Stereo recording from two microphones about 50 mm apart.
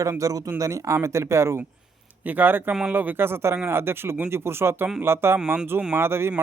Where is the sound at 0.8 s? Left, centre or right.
Right.